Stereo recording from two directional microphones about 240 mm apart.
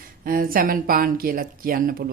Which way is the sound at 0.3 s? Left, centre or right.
Right.